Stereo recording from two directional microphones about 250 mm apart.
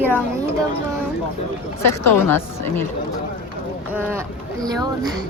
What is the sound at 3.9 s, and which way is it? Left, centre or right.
Speech, centre.